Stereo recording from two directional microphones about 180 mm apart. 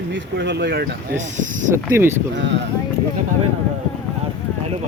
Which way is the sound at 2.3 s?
80° right.